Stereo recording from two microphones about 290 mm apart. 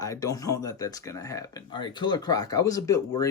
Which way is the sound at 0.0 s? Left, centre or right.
Centre.